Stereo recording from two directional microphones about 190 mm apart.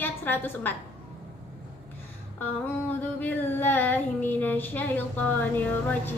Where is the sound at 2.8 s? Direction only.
10° left (ahead or behind).